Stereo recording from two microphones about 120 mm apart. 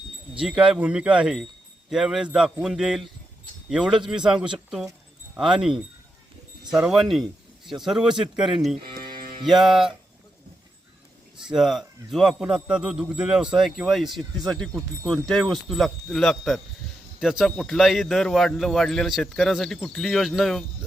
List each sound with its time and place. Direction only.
0.3 s speech: 5° right (ahead or behind)
8.7 s speech: 50° right (ahead or behind)
9.5 s speech: 5° right (ahead or behind)
11.3 s speech: 5° right (ahead or behind)